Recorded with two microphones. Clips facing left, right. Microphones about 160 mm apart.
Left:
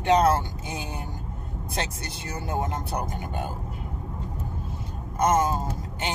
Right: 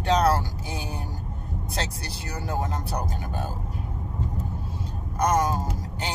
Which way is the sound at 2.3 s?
25° left (ahead or behind).